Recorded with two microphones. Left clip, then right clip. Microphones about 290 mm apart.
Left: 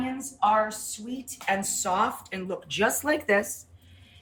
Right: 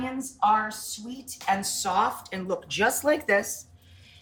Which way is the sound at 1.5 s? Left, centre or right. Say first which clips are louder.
Even; centre.